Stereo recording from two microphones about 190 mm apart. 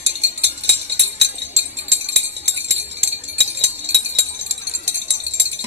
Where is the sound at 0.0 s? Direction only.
65° right (ahead or behind).